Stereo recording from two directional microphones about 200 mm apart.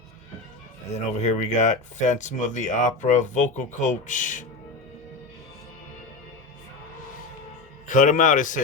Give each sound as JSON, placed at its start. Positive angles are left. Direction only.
{"t": 0.9, "sound": "speech", "side_deg": 35}
{"t": 7.9, "sound": "speech", "side_deg": 40}